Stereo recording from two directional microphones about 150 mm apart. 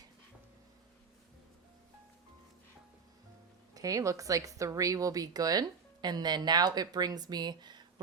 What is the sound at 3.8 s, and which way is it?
Speech, 20° right (ahead or behind).